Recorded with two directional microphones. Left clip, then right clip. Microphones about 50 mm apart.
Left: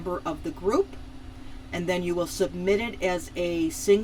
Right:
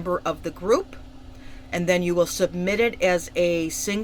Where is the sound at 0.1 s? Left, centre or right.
Right.